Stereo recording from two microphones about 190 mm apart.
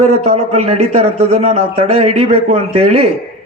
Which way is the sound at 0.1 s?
35° right (ahead or behind).